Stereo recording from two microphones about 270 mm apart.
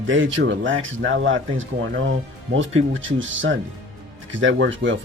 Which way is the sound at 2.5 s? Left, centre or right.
Right.